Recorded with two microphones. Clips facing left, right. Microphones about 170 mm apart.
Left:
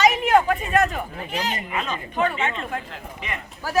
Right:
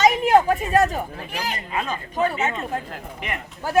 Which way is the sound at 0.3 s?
25° right (ahead or behind).